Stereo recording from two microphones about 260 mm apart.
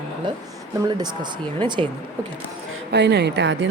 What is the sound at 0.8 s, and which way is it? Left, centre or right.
Speech, centre.